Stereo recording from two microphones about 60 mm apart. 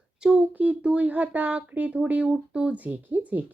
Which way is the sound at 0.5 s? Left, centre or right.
Right.